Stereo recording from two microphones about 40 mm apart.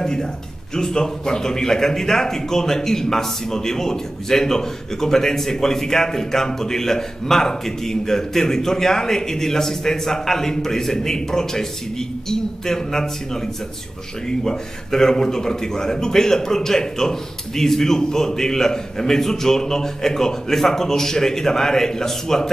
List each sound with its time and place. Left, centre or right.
0.0 s a sound: centre
0.7 s speech: centre
14.4 s speech: centre